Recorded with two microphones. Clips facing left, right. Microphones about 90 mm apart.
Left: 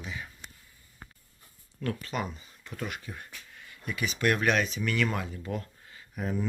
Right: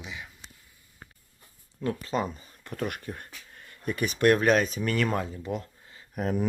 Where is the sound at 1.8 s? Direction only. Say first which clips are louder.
Right 4 dB; 30° right (ahead or behind).